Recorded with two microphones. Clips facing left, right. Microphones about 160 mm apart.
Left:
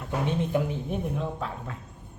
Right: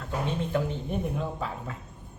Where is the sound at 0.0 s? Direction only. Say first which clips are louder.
Left 2 dB; 15° left (ahead or behind).